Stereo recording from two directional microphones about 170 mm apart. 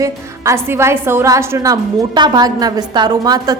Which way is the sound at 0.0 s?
15° right (ahead or behind).